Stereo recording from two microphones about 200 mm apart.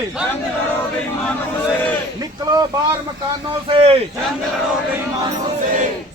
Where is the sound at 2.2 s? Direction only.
20° right (ahead or behind).